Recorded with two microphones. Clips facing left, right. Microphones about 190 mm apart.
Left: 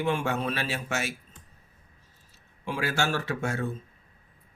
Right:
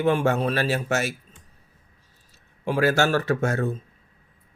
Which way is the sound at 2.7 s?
50° right (ahead or behind).